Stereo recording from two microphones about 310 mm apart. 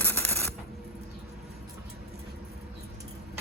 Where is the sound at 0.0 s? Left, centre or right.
Centre.